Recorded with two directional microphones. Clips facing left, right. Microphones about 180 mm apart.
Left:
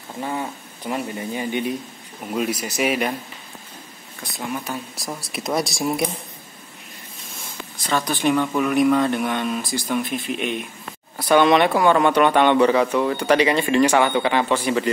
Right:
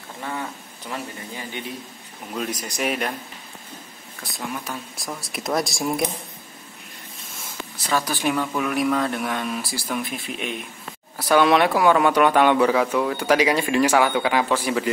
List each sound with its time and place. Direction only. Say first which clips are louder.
0.2 s speech: left 4 dB; 20° left (ahead or behind); by 3.2 s 5° left (ahead or behind)
4.2 s speech: left 3 dB; centre (ahead or behind)
7.7 s speech: left 1 dB; 5° right (ahead or behind)